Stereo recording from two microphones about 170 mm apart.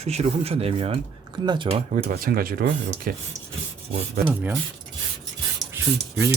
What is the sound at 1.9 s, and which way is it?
Speech, 60° right (ahead or behind).